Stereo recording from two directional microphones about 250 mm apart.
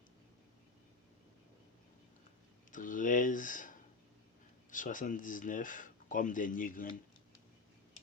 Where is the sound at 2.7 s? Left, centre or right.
Left.